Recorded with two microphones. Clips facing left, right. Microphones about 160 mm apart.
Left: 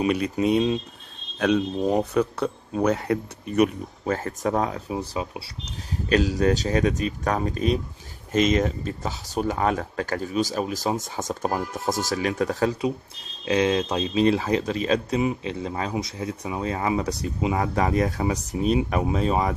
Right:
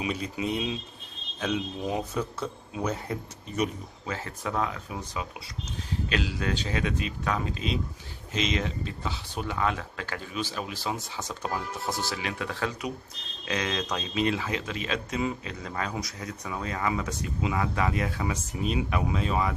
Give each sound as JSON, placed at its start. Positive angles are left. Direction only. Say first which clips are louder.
{"t": 0.0, "sound": "speech", "louder": "left 9 dB", "side_deg": 65}
{"t": 4.0, "sound": "speech", "louder": "left 9 dB", "side_deg": 45}
{"t": 6.0, "sound": "speech", "louder": "left 10 dB", "side_deg": 40}
{"t": 15.1, "sound": "speech", "louder": "left 6 dB", "side_deg": 25}